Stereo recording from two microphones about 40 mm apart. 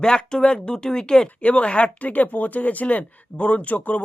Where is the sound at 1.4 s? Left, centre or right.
Left.